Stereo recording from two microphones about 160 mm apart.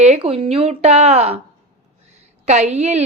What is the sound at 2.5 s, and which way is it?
Speech, 45° right (ahead or behind).